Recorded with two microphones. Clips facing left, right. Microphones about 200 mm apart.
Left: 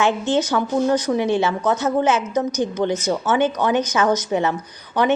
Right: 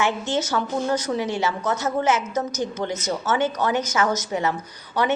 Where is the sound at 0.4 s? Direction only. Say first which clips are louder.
Left 5 dB; 15° left (ahead or behind).